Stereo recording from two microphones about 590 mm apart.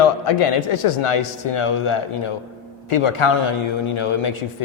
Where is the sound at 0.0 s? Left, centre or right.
Left.